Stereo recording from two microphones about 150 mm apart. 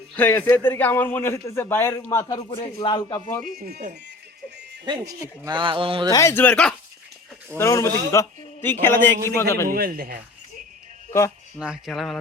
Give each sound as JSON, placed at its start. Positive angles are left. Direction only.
{"t": 0.2, "sound": "a man's voice", "side_deg": 10}
{"t": 3.3, "sound": "speech", "side_deg": 0}
{"t": 3.6, "sound": "a man's voice", "side_deg": -85}
{"t": 4.9, "sound": "speech", "side_deg": -25}
{"t": 6.1, "sound": "a man's voice", "side_deg": 20}
{"t": 7.5, "sound": "a man's voice", "side_deg": 20}
{"t": 9.6, "sound": "a man's voice", "side_deg": -80}
{"t": 11.5, "sound": "speech", "side_deg": -5}